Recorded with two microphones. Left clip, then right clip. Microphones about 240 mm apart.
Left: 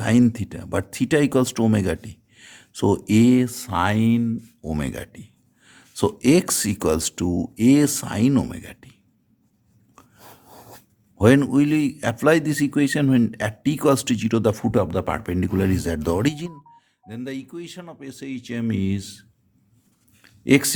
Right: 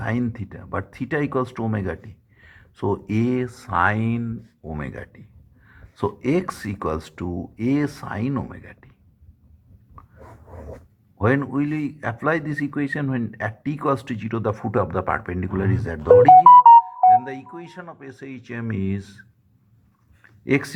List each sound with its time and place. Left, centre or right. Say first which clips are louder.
0.0 s a man's voice: left 7 dB; left
11.2 s a man's voice: left 5 dB; left
20.2 s a sound: left 4 dB; left